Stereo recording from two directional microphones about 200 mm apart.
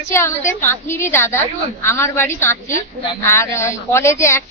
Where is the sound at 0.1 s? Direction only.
15° left (ahead or behind).